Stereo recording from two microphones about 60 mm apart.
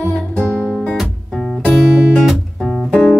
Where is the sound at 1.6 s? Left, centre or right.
Centre.